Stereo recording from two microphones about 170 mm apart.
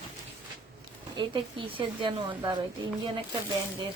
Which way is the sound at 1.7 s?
30° right (ahead or behind).